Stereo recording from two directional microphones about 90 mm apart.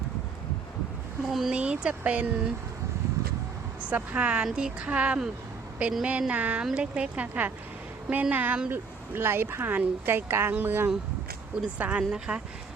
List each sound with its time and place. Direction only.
1.3 s speech: 5° right (ahead or behind)
3.8 s speech: 15° right (ahead or behind)
8.7 s speech: 25° right (ahead or behind); by 12.4 s 10° right (ahead or behind)